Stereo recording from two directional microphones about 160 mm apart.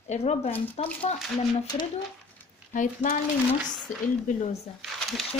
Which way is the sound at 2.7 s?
50° left (ahead or behind).